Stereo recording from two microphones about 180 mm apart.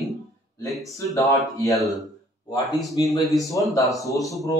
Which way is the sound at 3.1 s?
Centre (ahead or behind).